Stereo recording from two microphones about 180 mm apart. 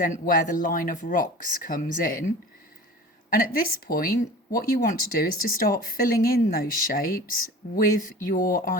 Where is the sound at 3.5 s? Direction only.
50° left (ahead or behind).